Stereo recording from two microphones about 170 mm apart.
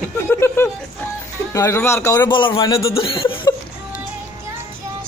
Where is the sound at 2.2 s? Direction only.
30° left (ahead or behind).